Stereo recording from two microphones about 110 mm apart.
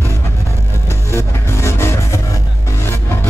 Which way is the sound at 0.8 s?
25° left (ahead or behind).